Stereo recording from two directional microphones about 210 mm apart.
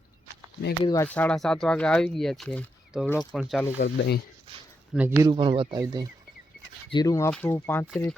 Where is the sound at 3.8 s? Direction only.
50° left (ahead or behind).